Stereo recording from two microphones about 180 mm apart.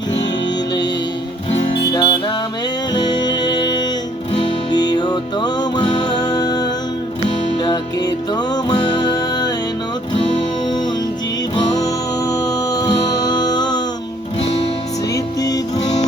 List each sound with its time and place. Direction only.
1.5 s music: 25° left (ahead or behind)
11.5 s music: 20° left (ahead or behind)
15.1 s music: 20° left (ahead or behind)